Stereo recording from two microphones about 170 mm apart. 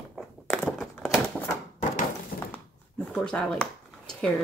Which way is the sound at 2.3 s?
60° left (ahead or behind).